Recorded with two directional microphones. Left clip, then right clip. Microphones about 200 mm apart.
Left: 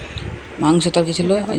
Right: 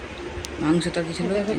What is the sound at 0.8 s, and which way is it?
Speech, 30° left (ahead or behind).